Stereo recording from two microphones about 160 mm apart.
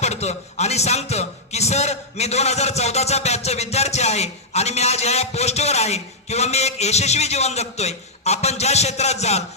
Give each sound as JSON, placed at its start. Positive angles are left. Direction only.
{"t": 0.0, "sound": "speech", "side_deg": 45}